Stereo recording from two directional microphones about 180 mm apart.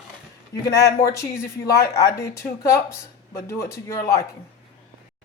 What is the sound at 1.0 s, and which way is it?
Speech, 35° left (ahead or behind).